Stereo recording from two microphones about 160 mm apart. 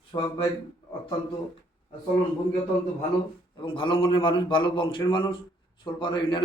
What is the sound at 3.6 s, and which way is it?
A man's voice, 35° left (ahead or behind).